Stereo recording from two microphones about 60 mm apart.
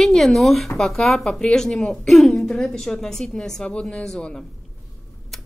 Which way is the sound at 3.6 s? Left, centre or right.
Centre.